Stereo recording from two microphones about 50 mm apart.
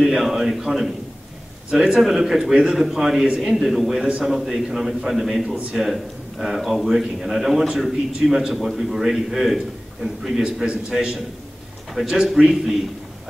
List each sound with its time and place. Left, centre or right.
0.0 s a man's voice: centre
10.4 s a man's voice: centre